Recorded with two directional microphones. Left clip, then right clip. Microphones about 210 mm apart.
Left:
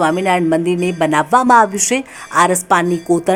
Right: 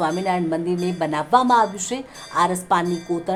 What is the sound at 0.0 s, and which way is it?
A woman's voice, 25° left (ahead or behind).